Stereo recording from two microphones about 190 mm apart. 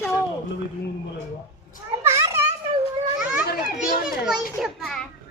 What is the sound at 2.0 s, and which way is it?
Children playing, 15° right (ahead or behind).